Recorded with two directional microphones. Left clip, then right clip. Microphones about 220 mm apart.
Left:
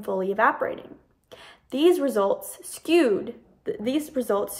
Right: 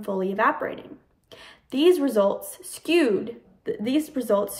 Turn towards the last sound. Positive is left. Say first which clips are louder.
# right 2 dB
turn(degrees=20)  # may be behind; listen again after turning